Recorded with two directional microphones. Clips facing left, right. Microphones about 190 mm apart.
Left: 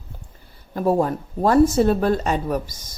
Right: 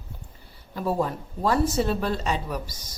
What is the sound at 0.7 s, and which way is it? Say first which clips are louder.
A woman's voice: left 6 dB; 50° left (ahead or behind).